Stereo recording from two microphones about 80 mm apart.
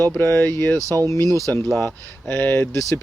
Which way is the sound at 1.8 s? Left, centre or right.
Left.